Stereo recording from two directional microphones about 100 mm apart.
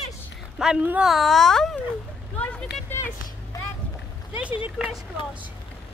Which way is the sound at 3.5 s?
40° left (ahead or behind).